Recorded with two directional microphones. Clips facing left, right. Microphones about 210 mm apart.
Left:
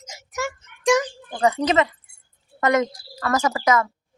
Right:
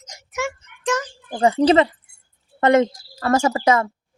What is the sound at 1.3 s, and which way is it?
A woman's voice, 30° right (ahead or behind).